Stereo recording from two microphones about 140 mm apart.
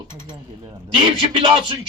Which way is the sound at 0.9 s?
35° right (ahead or behind).